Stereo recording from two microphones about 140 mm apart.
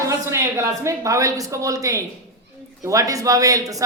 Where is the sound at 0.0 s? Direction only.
20° right (ahead or behind).